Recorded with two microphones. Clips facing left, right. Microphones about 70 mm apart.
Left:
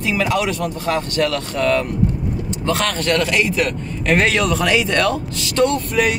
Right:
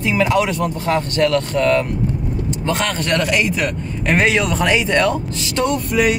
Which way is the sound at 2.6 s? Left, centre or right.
Centre.